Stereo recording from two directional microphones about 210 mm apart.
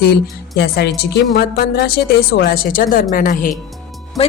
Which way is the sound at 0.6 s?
50° left (ahead or behind).